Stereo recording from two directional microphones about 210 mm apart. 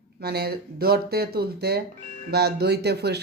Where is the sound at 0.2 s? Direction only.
50° right (ahead or behind).